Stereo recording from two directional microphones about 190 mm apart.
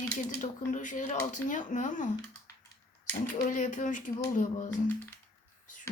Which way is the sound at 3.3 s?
40° left (ahead or behind).